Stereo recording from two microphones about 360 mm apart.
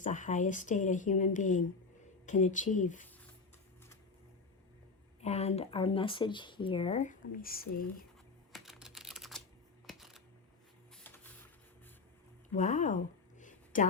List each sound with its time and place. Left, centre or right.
0.0 s speech: left
5.2 s speech: centre
8.5 s typing: centre
9.8 s a sound: centre
10.9 s printer: centre
12.5 s a sound: centre